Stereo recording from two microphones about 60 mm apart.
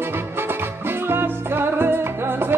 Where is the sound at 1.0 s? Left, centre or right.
Right.